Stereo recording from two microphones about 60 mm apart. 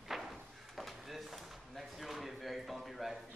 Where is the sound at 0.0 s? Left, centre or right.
Centre.